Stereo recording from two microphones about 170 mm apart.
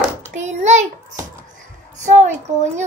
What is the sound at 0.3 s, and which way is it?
Speech, 45° right (ahead or behind).